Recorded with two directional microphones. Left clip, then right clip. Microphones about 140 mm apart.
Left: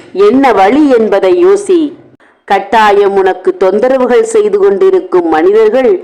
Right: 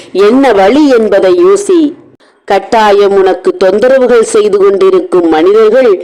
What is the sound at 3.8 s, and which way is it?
Speech, 35° right (ahead or behind).